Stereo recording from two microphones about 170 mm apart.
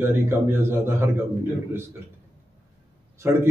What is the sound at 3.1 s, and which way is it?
Speech, 15° right (ahead or behind).